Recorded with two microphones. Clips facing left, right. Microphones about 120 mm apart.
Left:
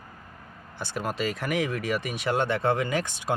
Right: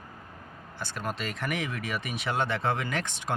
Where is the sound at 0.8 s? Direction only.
10° left (ahead or behind).